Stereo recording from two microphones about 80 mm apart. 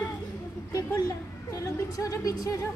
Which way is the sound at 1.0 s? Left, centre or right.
Left.